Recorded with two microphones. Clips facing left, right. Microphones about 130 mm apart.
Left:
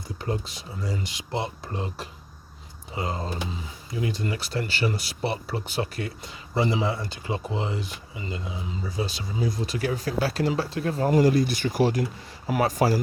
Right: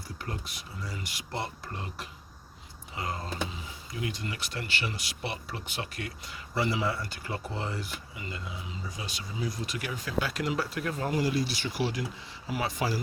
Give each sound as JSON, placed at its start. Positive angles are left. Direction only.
{"t": 0.2, "sound": "speech", "side_deg": 25}
{"t": 11.1, "sound": "speech", "side_deg": 50}